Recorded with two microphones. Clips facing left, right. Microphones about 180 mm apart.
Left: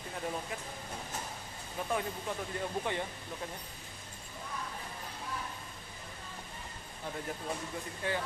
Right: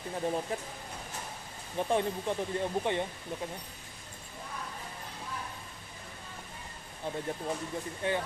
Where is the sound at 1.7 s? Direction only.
30° right (ahead or behind).